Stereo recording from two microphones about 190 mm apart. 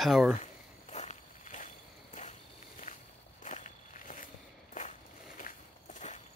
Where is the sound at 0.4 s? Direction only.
35° left (ahead or behind).